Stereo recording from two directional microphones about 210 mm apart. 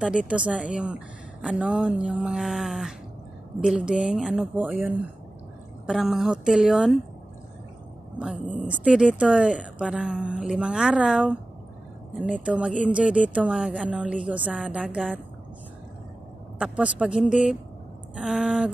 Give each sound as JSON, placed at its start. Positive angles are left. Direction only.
{"t": 0.3, "sound": "a woman's voice", "side_deg": -5}
{"t": 8.4, "sound": "speech", "side_deg": -35}
{"t": 8.6, "sound": "a woman's voice", "side_deg": -5}
{"t": 16.5, "sound": "a woman's voice", "side_deg": -5}